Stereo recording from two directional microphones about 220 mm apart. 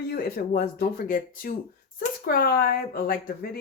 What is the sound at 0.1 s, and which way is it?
Speech, 45° left (ahead or behind).